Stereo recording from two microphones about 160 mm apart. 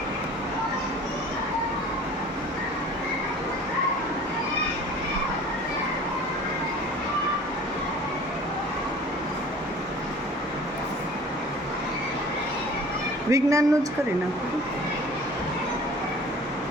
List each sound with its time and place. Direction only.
13.3 s a woman's voice: 20° right (ahead or behind)